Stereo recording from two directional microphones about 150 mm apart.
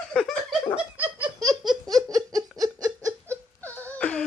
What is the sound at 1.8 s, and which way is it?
Laughter, 25° right (ahead or behind).